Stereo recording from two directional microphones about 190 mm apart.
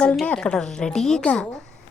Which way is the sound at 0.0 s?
5° left (ahead or behind).